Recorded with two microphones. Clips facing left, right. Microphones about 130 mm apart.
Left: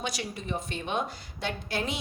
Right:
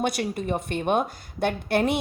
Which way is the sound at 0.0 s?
55° right (ahead or behind).